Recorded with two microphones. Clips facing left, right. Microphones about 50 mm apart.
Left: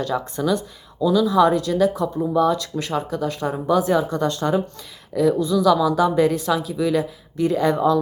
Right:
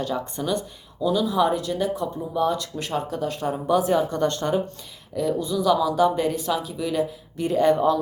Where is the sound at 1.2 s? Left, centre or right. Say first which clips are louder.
Left 6 dB; left.